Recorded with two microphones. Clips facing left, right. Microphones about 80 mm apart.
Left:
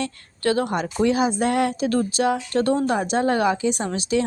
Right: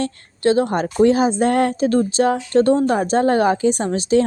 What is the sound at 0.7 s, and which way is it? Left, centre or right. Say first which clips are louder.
Speech: right 6 dB; right.